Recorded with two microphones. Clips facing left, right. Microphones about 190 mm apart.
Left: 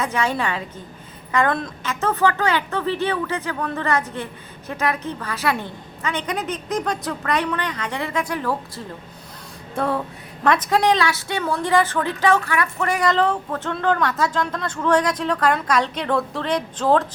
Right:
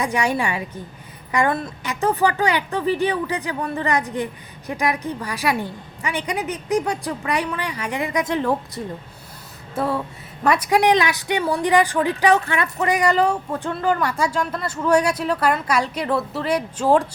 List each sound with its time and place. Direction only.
0.0 s a woman's voice: 15° right (ahead or behind)
9.7 s a sound: centre (ahead or behind)
10.4 s a woman's voice: 10° right (ahead or behind)